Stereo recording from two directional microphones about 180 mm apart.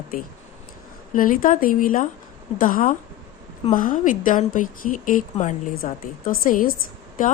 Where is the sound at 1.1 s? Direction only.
50° left (ahead or behind).